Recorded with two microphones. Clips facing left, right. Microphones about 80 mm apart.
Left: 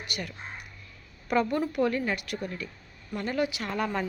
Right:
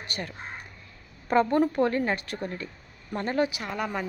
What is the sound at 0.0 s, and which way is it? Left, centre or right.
A woman's voice, right.